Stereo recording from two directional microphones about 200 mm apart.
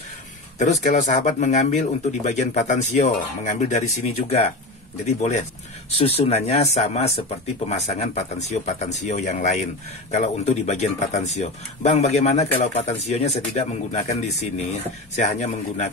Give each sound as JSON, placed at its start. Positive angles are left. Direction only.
{"t": 0.6, "sound": "speech", "side_deg": 35}
{"t": 15.1, "sound": "speech", "side_deg": 35}